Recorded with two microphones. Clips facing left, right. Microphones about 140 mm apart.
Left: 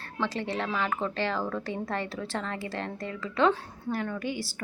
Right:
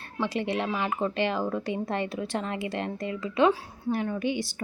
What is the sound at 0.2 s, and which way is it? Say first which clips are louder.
Speech: right 3 dB; 15° right (ahead or behind).